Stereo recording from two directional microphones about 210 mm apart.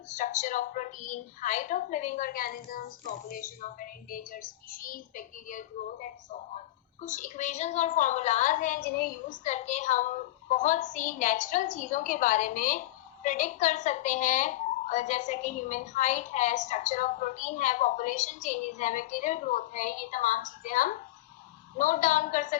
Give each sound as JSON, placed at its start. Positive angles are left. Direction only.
{"t": 0.1, "sound": "speech", "side_deg": 35}